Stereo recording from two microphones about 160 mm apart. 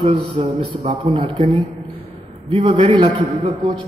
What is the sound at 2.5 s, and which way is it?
A man's voice, 30° right (ahead or behind).